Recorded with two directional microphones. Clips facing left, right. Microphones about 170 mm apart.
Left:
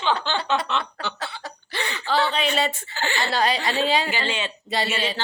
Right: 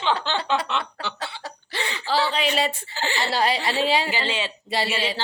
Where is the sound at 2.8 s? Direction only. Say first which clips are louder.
Even; 30° right (ahead or behind).